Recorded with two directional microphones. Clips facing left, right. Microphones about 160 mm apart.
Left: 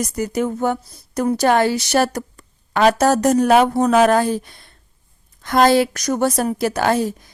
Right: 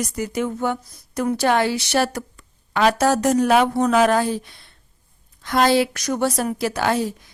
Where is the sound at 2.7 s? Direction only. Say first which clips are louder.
Left 3 dB; 45° left (ahead or behind).